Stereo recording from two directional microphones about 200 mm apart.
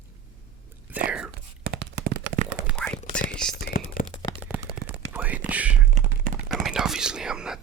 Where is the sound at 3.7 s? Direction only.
45° left (ahead or behind).